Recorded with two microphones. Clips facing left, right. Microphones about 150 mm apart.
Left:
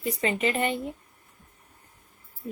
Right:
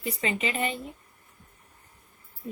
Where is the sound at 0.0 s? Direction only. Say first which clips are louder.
Left 3 dB; 45° left (ahead or behind).